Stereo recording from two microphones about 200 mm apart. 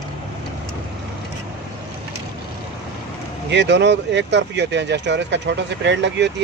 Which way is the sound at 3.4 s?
60° right (ahead or behind).